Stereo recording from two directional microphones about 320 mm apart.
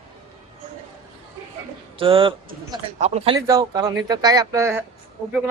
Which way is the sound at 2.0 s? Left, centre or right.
Centre.